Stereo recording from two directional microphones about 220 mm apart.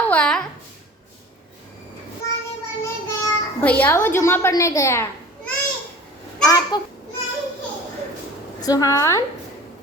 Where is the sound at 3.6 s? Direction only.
5° left (ahead or behind).